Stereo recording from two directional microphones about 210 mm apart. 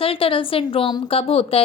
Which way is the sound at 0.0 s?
25° left (ahead or behind).